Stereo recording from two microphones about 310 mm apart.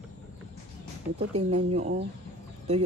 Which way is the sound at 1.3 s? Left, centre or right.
Right.